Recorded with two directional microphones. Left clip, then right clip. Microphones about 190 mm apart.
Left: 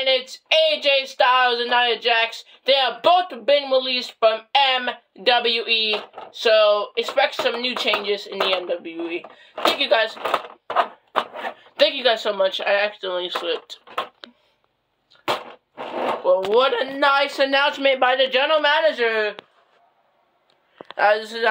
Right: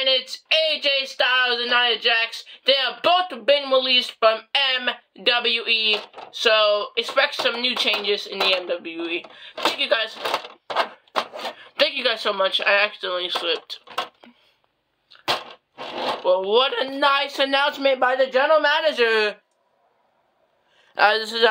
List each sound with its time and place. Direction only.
0.0 s speech: centre (ahead or behind)
16.3 s speech: 5° left (ahead or behind)
18.0 s speech: 20° left (ahead or behind)
19.0 s speech: 30° right (ahead or behind)
21.2 s speech: 35° right (ahead or behind)